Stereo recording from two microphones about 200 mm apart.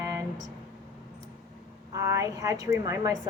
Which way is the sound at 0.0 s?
15° right (ahead or behind).